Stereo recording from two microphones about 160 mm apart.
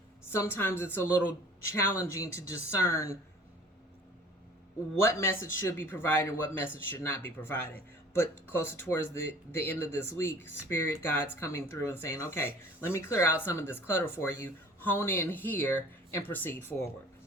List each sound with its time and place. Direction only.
0.3 s speech: 15° left (ahead or behind)
4.9 s speech: 15° left (ahead or behind)